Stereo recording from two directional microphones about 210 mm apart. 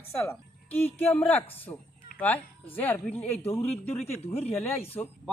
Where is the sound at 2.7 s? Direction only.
10° left (ahead or behind).